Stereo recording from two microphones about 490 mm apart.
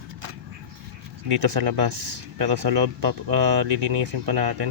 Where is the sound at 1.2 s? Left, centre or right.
Right.